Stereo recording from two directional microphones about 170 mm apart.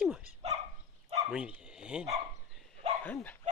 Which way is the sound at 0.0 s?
5° right (ahead or behind).